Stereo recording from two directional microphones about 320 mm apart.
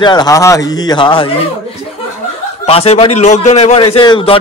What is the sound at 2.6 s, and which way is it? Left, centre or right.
A man's voice, centre.